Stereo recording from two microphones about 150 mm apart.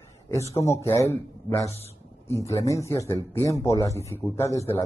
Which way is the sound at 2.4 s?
20° left (ahead or behind).